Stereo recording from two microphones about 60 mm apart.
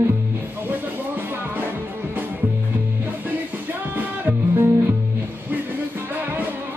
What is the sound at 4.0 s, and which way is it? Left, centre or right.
Music, right.